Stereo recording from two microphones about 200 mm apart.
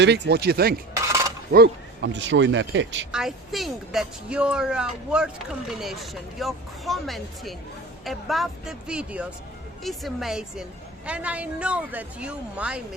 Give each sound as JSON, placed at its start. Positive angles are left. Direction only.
{"t": 0.0, "sound": "speech", "side_deg": -60}
{"t": 3.1, "sound": "speech", "side_deg": 0}